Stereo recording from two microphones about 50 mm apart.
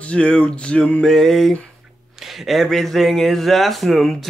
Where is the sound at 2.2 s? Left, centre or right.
Centre.